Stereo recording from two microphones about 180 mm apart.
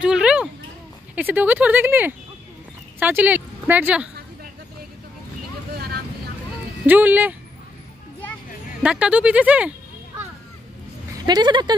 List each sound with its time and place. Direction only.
0.0 s a sound: 5° right (ahead or behind)
1.1 s a woman's voice: 10° right (ahead or behind)
6.9 s speech: 10° right (ahead or behind)
8.8 s speech: 5° right (ahead or behind)
11.2 s speech: 25° right (ahead or behind)